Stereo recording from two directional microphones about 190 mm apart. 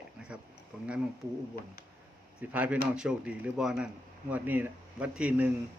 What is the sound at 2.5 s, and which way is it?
A man's voice, 10° right (ahead or behind).